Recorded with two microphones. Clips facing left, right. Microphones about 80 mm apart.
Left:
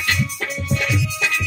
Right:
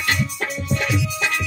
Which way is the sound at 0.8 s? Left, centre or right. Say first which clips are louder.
Right 1 dB; right.